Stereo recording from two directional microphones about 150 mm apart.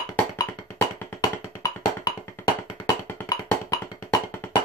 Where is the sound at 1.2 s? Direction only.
25° left (ahead or behind).